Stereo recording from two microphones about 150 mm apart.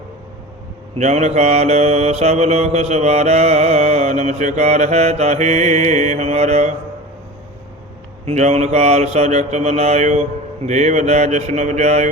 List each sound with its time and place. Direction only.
0.9 s mantra: 50° right (ahead or behind)
8.2 s mantra: 45° right (ahead or behind)